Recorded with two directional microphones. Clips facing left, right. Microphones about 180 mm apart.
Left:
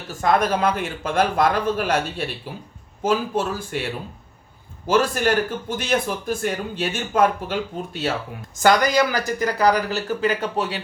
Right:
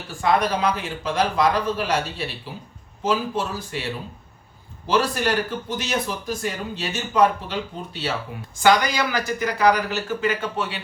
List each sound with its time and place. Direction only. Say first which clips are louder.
0.1 s speech: left 1 dB; 45° left (ahead or behind)
4.9 s speech: left 2 dB; 50° left (ahead or behind)